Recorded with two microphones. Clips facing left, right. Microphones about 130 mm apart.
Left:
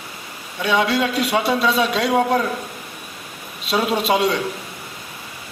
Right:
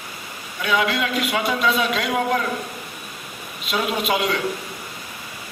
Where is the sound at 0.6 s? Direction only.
30° left (ahead or behind).